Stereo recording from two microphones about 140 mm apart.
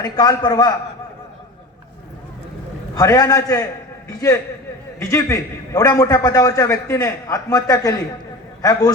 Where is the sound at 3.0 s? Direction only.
25° left (ahead or behind).